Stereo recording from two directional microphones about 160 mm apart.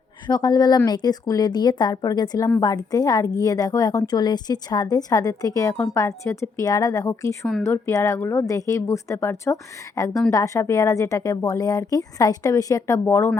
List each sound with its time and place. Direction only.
0.3 s a woman's voice: 25° left (ahead or behind)